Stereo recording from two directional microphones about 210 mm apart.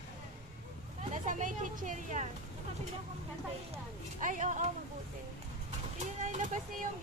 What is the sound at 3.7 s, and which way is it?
Speech, 35° right (ahead or behind).